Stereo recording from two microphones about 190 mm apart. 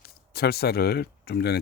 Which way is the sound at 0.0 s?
55° left (ahead or behind).